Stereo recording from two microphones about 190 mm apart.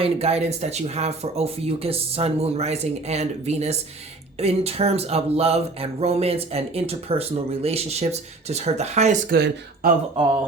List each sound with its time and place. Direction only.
0.0 s speech: 30° right (ahead or behind)
9.3 s speech: 55° right (ahead or behind)